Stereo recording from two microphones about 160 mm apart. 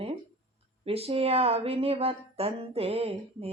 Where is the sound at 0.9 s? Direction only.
40° right (ahead or behind).